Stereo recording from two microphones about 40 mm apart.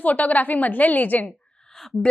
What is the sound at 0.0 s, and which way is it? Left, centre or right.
A woman's voice, left.